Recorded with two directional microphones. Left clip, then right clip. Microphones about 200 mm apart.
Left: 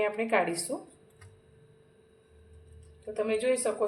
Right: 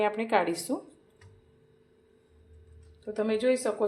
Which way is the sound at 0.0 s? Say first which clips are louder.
Right 1 dB; 40° right (ahead or behind).